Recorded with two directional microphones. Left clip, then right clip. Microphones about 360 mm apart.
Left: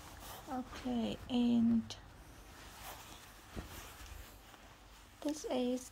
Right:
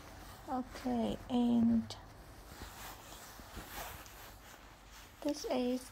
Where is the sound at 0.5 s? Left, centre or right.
Centre.